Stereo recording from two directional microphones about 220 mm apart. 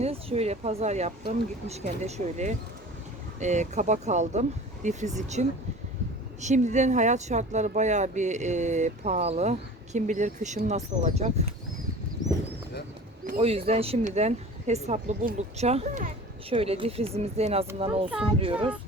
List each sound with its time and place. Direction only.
0.0 s speech: 25° right (ahead or behind)
13.2 s speech: 30° right (ahead or behind)